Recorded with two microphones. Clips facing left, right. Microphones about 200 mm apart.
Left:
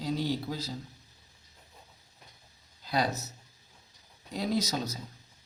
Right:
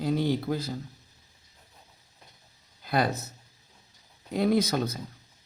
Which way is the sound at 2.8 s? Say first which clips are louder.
Right 3 dB; 55° right (ahead or behind).